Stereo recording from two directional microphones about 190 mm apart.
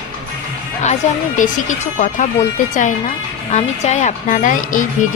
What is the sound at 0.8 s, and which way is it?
Speech, 40° left (ahead or behind).